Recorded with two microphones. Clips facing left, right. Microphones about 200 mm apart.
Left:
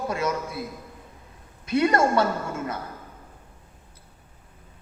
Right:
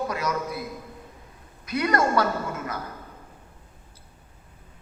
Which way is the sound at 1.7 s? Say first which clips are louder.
Left 3 dB; 25° left (ahead or behind).